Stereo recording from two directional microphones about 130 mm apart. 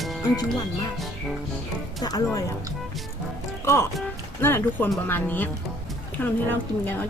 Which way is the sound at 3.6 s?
20° left (ahead or behind).